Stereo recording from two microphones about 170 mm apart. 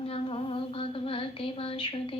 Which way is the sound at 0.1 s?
35° left (ahead or behind).